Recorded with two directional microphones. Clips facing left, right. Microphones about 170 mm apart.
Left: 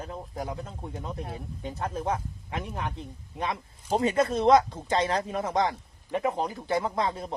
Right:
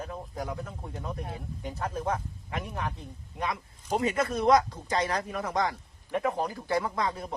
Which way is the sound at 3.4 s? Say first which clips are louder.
Left 1 dB; 30° left (ahead or behind).